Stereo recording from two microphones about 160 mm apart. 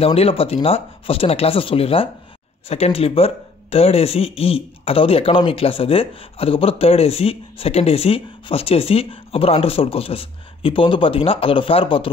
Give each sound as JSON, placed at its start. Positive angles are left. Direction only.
{"t": 0.0, "sound": "speech", "side_deg": 40}